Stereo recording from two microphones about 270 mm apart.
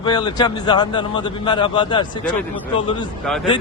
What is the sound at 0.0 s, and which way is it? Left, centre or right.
A man's voice, centre.